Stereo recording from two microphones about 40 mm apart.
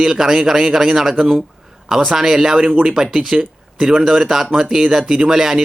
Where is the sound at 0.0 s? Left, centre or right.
Centre.